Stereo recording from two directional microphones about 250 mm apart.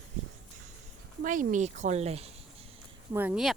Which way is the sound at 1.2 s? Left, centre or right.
Right.